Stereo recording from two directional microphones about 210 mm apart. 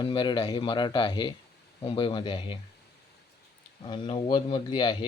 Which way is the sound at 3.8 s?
25° left (ahead or behind).